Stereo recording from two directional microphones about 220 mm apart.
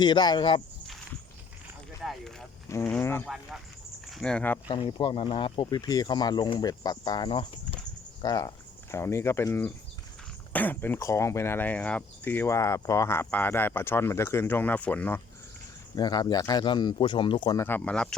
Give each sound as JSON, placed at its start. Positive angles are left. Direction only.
{"t": 0.0, "sound": "speech", "side_deg": 20}
{"t": 2.0, "sound": "clip-clop", "side_deg": 0}
{"t": 2.6, "sound": "speech", "side_deg": 10}
{"t": 3.2, "sound": "speech", "side_deg": 0}
{"t": 4.7, "sound": "speech", "side_deg": 20}
{"t": 16.0, "sound": "speech", "side_deg": 20}